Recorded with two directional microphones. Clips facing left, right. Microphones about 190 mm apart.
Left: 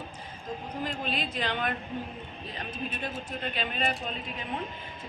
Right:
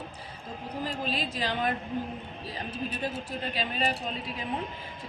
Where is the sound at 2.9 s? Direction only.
35° right (ahead or behind).